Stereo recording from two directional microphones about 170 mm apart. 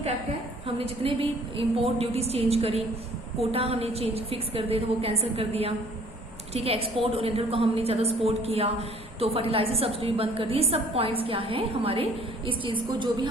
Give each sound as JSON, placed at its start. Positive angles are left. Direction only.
{"t": 0.9, "sound": "a woman's voice", "side_deg": -30}